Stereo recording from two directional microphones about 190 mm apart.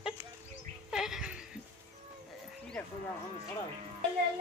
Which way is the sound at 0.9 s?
5° right (ahead or behind).